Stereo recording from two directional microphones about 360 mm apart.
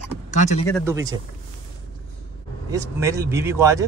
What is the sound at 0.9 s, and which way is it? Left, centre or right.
Speech, centre.